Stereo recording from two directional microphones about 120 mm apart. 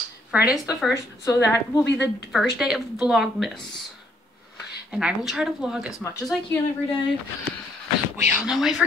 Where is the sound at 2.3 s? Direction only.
5° right (ahead or behind).